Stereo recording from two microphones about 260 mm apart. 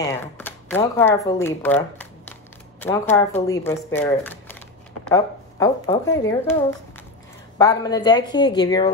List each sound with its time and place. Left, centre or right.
0.0 s speech: centre
7.5 s a woman's voice: centre